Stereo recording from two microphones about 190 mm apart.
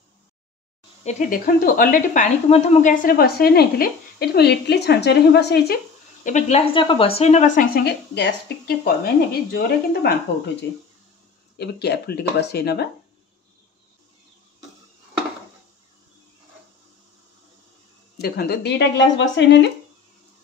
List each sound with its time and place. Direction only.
1.0 s speech: 50° left (ahead or behind)
6.2 s speech: 40° left (ahead or behind)
6.7 s speech: 25° left (ahead or behind); by 7.8 s 40° left (ahead or behind)
7.8 s speech: 60° left (ahead or behind)
18.1 s speech: 55° left (ahead or behind)